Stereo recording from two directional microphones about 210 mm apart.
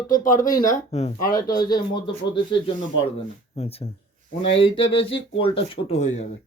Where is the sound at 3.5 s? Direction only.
30° left (ahead or behind).